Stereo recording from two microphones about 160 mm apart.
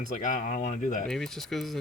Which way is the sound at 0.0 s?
50° left (ahead or behind).